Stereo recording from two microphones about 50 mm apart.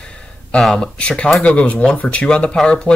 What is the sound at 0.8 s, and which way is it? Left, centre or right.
Speech, left.